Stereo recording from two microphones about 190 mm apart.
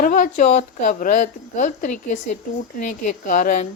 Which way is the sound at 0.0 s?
45° left (ahead or behind).